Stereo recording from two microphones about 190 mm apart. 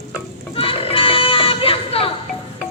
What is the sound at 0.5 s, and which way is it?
Music, 30° left (ahead or behind).